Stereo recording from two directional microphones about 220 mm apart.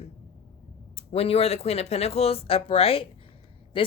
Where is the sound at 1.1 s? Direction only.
25° left (ahead or behind).